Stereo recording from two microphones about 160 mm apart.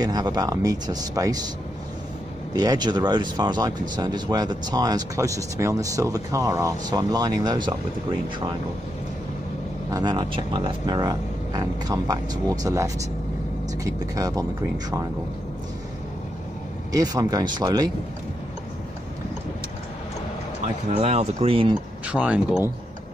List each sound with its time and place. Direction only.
0.0 s speech: 25° right (ahead or behind)
2.5 s speech: 25° right (ahead or behind)
9.8 s speech: 25° right (ahead or behind)
16.9 s speech: 25° right (ahead or behind)
20.9 s speech: 40° right (ahead or behind)
22.0 s speech: 10° right (ahead or behind)